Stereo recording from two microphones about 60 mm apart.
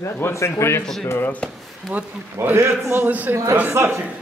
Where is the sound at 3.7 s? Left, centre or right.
Right.